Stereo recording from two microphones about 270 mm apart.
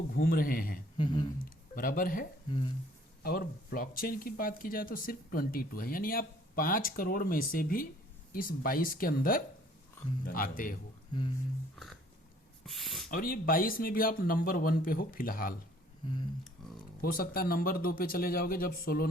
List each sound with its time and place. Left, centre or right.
0.1 s speech: left
0.9 s speech: centre
1.7 s speech: left
2.5 s speech: centre
3.2 s speech: left
12.6 s a sound: centre
13.1 s speech: left
16.6 s typing: centre
17.0 s speech: left